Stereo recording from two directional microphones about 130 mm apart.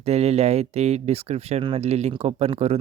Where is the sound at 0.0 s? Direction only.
55° right (ahead or behind).